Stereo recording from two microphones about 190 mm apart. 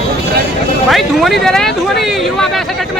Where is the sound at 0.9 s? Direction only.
Centre (ahead or behind).